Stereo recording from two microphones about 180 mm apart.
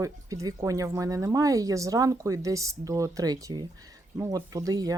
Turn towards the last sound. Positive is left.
turn(degrees=-20)  # may be behind; listen again after turning